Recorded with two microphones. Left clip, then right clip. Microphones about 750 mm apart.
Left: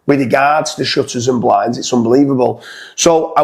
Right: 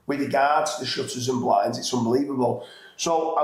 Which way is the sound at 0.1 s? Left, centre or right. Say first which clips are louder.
Left 10 dB; left.